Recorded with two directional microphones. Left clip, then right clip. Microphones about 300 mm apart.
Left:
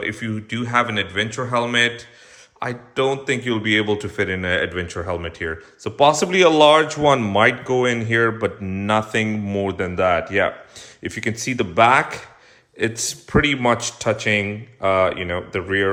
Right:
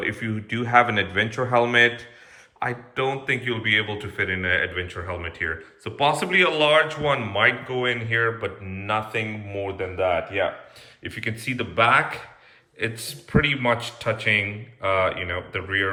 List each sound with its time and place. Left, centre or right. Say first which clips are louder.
0.0 s a man's voice: left 1 dB; centre